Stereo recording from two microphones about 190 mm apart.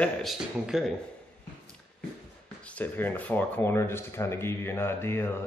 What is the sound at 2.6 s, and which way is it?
Speech, 10° left (ahead or behind).